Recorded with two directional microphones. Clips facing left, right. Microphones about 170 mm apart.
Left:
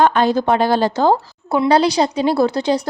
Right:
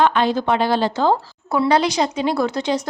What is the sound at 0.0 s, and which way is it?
A woman's voice, 45° left (ahead or behind).